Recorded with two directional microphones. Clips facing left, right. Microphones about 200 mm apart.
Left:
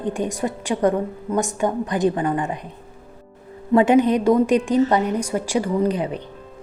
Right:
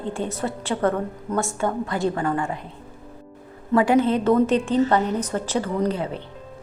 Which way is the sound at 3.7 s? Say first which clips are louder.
Left 3 dB; 20° left (ahead or behind).